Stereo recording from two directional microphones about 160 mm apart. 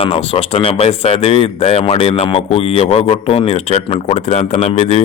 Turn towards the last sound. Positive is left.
turn(degrees=45)  # may be behind; listen again after turning